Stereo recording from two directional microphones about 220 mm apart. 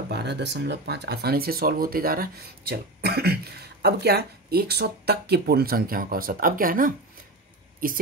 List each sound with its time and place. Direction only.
0.1 s a woman's voice: 50° right (ahead or behind)